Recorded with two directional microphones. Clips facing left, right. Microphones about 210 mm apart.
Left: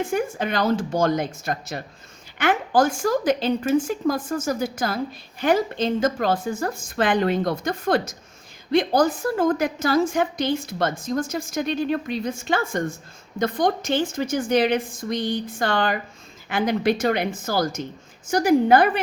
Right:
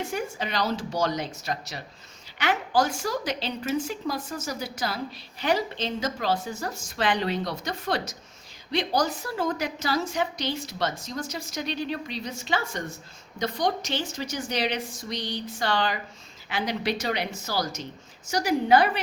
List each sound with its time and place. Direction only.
0.0 s a woman's voice: 50° left (ahead or behind)